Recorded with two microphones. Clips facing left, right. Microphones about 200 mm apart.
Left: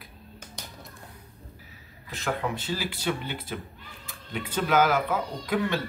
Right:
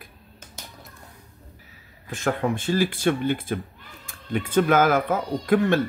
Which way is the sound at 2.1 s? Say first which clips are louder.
Right 6 dB; 50° right (ahead or behind).